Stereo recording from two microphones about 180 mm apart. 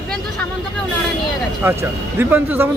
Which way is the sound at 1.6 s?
10° right (ahead or behind).